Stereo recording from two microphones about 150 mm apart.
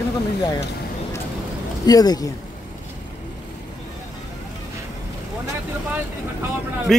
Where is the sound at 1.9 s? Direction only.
25° left (ahead or behind).